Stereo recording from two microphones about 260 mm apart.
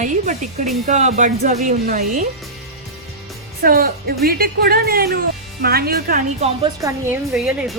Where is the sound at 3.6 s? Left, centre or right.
Right.